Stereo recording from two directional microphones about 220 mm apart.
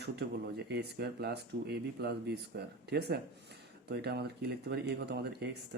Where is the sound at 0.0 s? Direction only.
50° right (ahead or behind).